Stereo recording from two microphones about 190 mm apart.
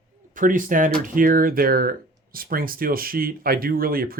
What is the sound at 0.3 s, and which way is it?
Speech, 45° right (ahead or behind).